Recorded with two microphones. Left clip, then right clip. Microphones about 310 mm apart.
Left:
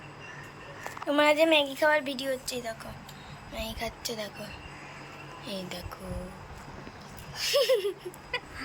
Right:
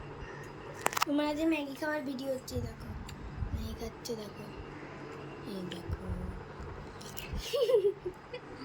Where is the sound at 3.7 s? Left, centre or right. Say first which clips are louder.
Left 2 dB; centre.